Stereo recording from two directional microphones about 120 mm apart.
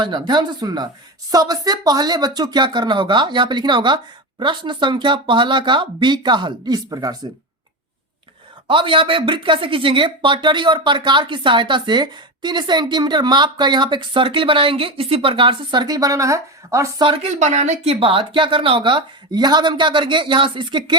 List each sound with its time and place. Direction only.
0.0 s speech: 40° right (ahead or behind)
8.6 s speech: 45° right (ahead or behind); by 16.9 s 25° right (ahead or behind)
17.2 s speech: 75° right (ahead or behind)
18.0 s speech: 45° right (ahead or behind)